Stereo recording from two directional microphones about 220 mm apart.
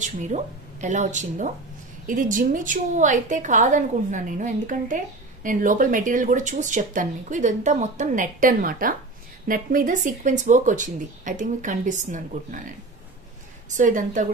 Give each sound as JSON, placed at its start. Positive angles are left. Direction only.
{"t": 0.0, "sound": "a woman's voice", "side_deg": -35}
{"t": 13.7, "sound": "a woman's voice", "side_deg": -35}